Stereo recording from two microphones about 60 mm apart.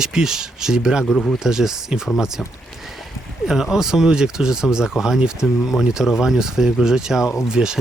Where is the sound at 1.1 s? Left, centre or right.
Centre.